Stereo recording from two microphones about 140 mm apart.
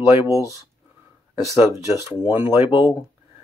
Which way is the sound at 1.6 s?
15° right (ahead or behind).